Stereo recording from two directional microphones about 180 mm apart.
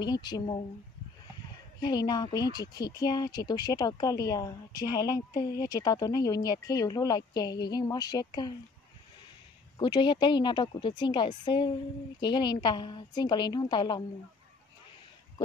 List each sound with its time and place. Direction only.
0.0 s speech: 25° left (ahead or behind)
1.8 s speech: 25° left (ahead or behind)
9.8 s speech: 25° left (ahead or behind)